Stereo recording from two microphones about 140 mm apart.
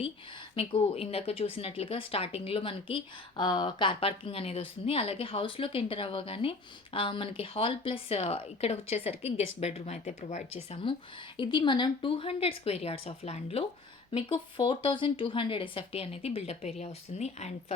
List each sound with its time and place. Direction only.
0.5 s speech: 45° left (ahead or behind)
11.3 s speech: 35° left (ahead or behind); by 17.7 s 50° left (ahead or behind)